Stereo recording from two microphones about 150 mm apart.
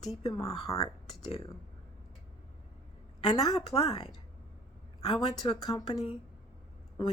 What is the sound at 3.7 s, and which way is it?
Speech, 45° left (ahead or behind).